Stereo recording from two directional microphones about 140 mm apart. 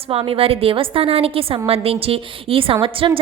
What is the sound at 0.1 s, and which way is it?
A woman's voice, 40° right (ahead or behind).